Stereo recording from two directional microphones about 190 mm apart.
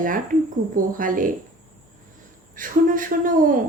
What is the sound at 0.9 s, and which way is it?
Speech, 45° right (ahead or behind).